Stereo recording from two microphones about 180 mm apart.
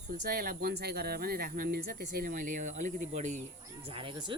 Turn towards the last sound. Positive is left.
turn(degrees=-25)  # may be behind; listen again after turning